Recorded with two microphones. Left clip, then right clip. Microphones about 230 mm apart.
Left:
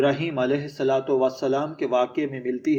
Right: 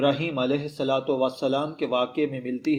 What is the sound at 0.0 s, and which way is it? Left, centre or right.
Speech, right.